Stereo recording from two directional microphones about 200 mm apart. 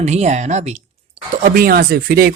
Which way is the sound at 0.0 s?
35° right (ahead or behind).